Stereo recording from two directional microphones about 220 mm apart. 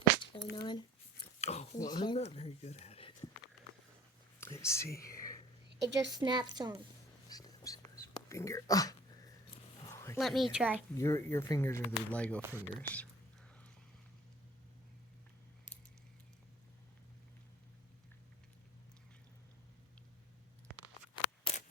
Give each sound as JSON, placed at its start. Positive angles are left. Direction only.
{"t": 0.5, "sound": "speech", "side_deg": 20}
{"t": 1.4, "sound": "a sound", "side_deg": 30}
{"t": 1.8, "sound": "speech", "side_deg": 20}
{"t": 4.4, "sound": "speech", "side_deg": 10}
{"t": 5.6, "sound": "a sound", "side_deg": -50}
{"t": 6.1, "sound": "a woman's voice", "side_deg": -20}
{"t": 7.3, "sound": "whispering", "side_deg": 15}
{"t": 9.8, "sound": "dog", "side_deg": 15}
{"t": 10.2, "sound": "speech", "side_deg": 0}
{"t": 10.9, "sound": "speech", "side_deg": 15}
{"t": 12.4, "sound": "speech", "side_deg": -10}
{"t": 12.7, "sound": "speech", "side_deg": 5}
{"t": 21.5, "sound": "scissors", "side_deg": 25}